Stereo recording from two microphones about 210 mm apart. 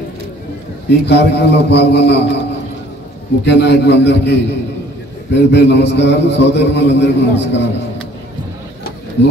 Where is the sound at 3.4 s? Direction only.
55° left (ahead or behind).